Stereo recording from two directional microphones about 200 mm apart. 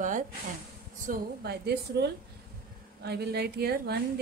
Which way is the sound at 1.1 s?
55° right (ahead or behind).